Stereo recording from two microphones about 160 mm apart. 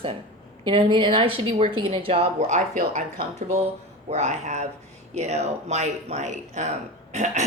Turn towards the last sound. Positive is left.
turn(degrees=-45)  # may be behind; listen again after turning